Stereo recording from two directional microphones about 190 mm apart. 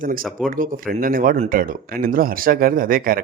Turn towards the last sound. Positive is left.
turn(degrees=-50)  # may be behind; listen again after turning